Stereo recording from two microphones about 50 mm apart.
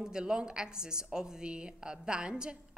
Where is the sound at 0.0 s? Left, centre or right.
Centre.